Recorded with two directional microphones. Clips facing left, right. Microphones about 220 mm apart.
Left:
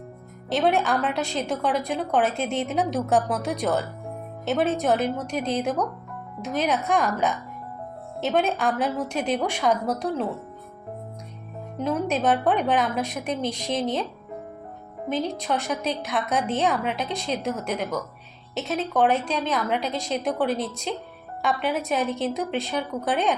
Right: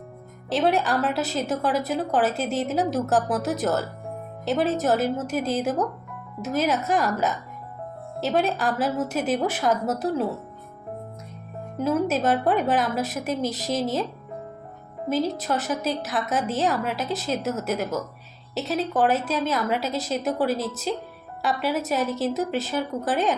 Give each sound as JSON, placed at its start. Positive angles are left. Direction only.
{"t": 0.5, "sound": "a woman's voice", "side_deg": 0}
{"t": 11.8, "sound": "a woman's voice", "side_deg": -5}
{"t": 15.1, "sound": "a woman's voice", "side_deg": -5}